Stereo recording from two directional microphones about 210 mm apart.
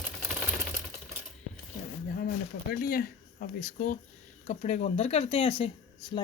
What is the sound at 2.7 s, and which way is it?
Speech, 45° left (ahead or behind).